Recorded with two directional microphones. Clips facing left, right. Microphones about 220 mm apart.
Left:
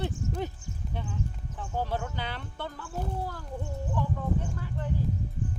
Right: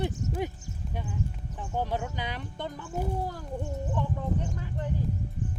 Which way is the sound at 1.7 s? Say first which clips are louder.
Right 1 dB; 15° right (ahead or behind).